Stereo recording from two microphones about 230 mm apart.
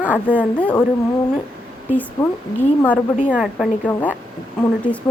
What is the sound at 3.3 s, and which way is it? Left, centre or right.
Speech, centre.